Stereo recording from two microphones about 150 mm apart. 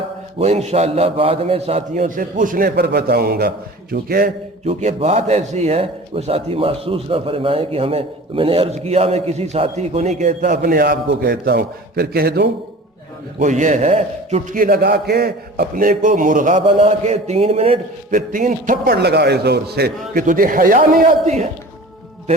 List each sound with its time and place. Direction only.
0.3 s a man's voice: 45° right (ahead or behind); by 4.3 s 90° right
4.6 s a man's voice: 45° right (ahead or behind)
10.5 s a man's voice: 85° right
13.4 s a man's voice: 55° right (ahead or behind)
14.5 s a man's voice: 70° right (ahead or behind)
16.6 s a man's voice: 45° right (ahead or behind)
18.1 s a man's voice: 65° right (ahead or behind); by 19.9 s 90° right
20.1 s a man's voice: 65° right (ahead or behind)
21.2 s a man's voice: 45° right (ahead or behind)